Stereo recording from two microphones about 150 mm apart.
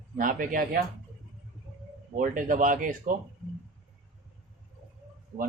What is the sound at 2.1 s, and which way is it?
Speech, 60° right (ahead or behind).